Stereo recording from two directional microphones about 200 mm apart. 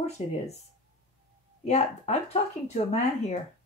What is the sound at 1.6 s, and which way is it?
Speech, 35° left (ahead or behind).